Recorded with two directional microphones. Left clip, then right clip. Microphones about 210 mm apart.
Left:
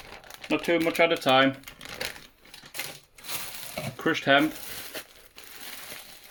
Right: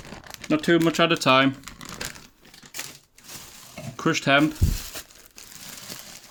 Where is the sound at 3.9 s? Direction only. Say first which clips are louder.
Right 2 dB; 35° right (ahead or behind).